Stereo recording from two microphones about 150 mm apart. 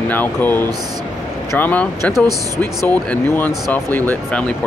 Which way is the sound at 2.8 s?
10° left (ahead or behind).